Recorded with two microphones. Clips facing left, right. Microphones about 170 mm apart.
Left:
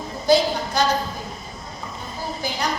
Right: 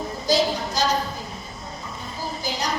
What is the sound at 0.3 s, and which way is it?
Speech, 60° left (ahead or behind).